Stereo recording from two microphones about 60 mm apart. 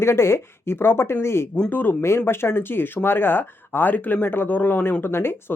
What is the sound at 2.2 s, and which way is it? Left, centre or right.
Speech, left.